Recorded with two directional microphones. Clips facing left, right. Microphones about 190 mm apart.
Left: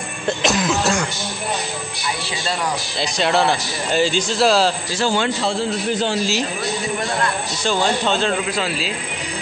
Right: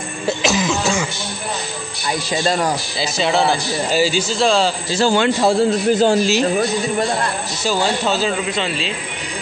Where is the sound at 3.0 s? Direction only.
Centre (ahead or behind).